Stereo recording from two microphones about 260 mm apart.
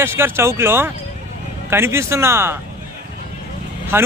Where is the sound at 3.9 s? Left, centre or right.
Centre.